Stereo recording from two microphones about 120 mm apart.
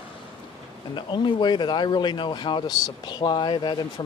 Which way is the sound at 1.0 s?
40° left (ahead or behind).